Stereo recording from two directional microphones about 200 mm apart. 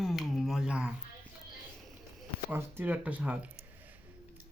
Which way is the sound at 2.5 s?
10° right (ahead or behind).